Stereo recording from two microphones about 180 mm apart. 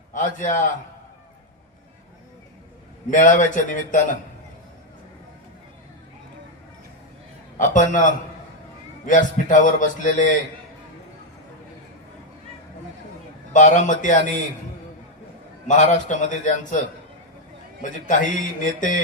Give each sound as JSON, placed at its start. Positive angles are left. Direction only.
{"t": 0.1, "sound": "a man's voice", "side_deg": 45}
{"t": 3.1, "sound": "a man's voice", "side_deg": 45}
{"t": 7.6, "sound": "a man's voice", "side_deg": 45}
{"t": 13.5, "sound": "a man's voice", "side_deg": 45}
{"t": 15.6, "sound": "a man's voice", "side_deg": 40}
{"t": 17.8, "sound": "a man's voice", "side_deg": 45}